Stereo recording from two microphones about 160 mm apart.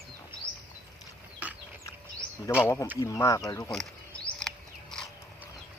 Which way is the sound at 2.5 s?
20° left (ahead or behind).